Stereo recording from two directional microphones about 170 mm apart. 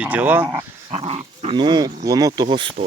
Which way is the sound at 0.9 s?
35° right (ahead or behind).